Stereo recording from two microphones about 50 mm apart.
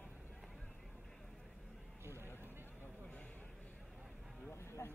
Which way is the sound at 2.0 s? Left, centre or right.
Right.